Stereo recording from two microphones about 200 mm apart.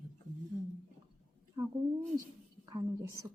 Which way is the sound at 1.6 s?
20° right (ahead or behind).